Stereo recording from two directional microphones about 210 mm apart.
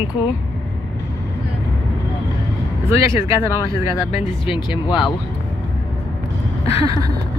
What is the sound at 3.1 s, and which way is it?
Speech, 15° right (ahead or behind).